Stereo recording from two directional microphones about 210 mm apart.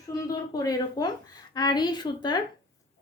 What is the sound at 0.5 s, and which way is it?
A woman's voice, 15° left (ahead or behind).